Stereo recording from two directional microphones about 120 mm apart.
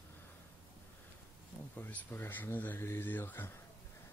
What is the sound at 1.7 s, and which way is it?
Speech, 15° left (ahead or behind).